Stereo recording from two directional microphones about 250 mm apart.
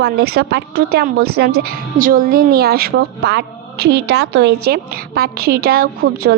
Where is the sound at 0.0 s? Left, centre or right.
Right.